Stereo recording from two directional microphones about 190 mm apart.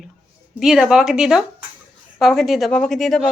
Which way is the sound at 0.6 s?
5° right (ahead or behind).